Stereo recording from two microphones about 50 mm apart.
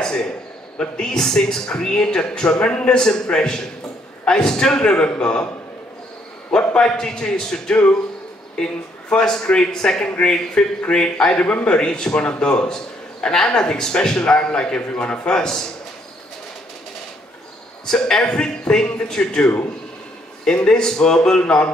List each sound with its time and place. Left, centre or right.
0.0 s a man's voice: centre
6.7 s a man's voice: centre
7.7 s mantra: left
9.1 s a man's voice: centre
17.8 s a man's voice: centre
21.4 s mantra: left